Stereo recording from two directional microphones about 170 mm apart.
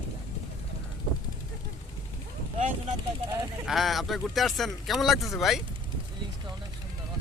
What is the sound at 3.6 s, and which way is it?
Speech, centre (ahead or behind).